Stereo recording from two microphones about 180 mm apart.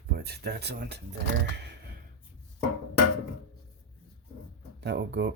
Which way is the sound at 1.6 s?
70° right (ahead or behind).